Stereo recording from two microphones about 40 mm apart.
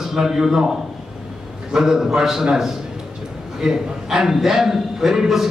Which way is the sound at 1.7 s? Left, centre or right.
Centre.